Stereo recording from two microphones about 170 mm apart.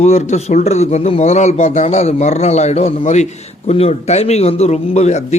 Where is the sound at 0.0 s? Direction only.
40° left (ahead or behind).